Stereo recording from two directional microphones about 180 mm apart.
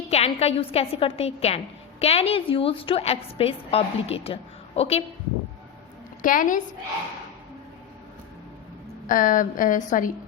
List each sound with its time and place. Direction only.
0.1 s a woman's voice: 35° left (ahead or behind)
6.2 s a woman's voice: 50° left (ahead or behind)
9.0 s a woman's voice: 45° left (ahead or behind)